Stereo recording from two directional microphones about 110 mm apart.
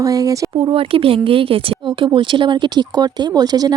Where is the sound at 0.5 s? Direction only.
55° right (ahead or behind).